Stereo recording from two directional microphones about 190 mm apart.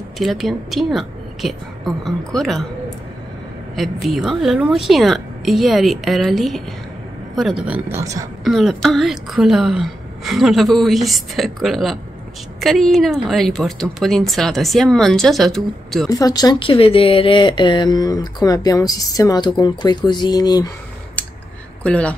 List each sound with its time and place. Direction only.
0.2 s speech: centre (ahead or behind)
3.7 s speech: centre (ahead or behind)
8.0 s a woman's voice: 15° right (ahead or behind)
8.5 s speech: centre (ahead or behind)
16.1 s speech: 20° left (ahead or behind)
21.8 s speech: 5° left (ahead or behind)